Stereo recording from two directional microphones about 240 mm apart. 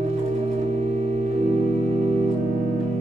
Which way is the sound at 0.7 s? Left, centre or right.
Right.